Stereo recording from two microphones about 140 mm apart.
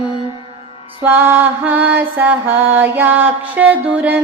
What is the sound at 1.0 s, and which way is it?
Music, 15° right (ahead or behind).